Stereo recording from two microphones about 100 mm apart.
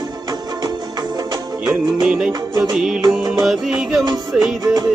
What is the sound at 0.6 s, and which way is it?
Music, 40° right (ahead or behind).